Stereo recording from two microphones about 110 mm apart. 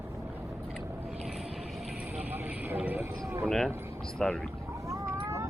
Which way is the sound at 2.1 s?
15° right (ahead or behind).